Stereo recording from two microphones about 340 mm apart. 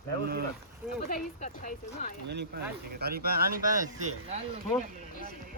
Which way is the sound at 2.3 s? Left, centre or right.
Right.